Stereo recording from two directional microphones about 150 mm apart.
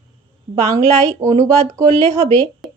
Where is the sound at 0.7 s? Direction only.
20° right (ahead or behind).